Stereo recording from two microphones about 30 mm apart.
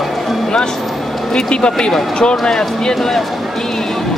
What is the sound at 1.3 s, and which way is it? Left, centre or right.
Speech, left.